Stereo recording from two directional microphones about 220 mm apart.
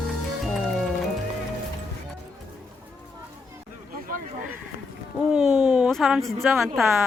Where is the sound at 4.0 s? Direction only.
40° right (ahead or behind).